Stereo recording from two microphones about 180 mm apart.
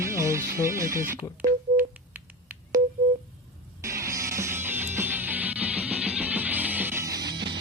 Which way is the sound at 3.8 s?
15° right (ahead or behind).